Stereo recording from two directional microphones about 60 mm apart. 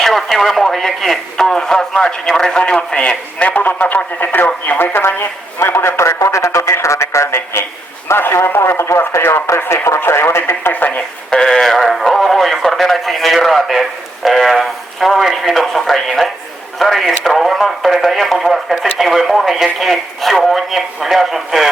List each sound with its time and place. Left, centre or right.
0.0 s speech: centre
3.5 s speech: left
4.8 s speech: left
5.5 s a man's voice: left
11.3 s speech: centre